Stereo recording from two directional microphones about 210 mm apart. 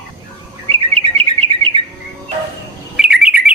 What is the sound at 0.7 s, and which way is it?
Chirp, 25° right (ahead or behind).